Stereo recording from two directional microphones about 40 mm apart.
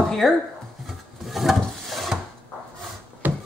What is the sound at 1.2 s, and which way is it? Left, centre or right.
Wood, centre.